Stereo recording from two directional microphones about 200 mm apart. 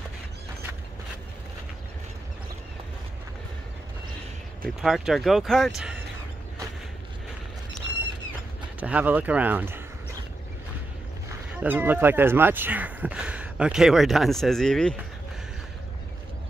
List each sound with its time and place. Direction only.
4.6 s speech: centre (ahead or behind)
8.7 s speech: 10° right (ahead or behind)
11.2 s speech: 10° right (ahead or behind)